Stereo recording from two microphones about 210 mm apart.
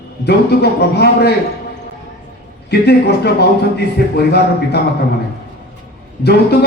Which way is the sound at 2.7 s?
50° left (ahead or behind).